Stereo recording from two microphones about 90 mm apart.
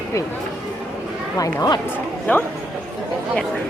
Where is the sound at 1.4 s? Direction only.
45° left (ahead or behind).